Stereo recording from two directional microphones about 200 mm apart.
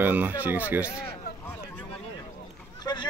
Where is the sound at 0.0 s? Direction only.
10° right (ahead or behind).